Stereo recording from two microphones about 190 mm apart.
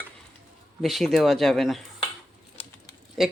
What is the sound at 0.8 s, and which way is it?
Speech, centre (ahead or behind).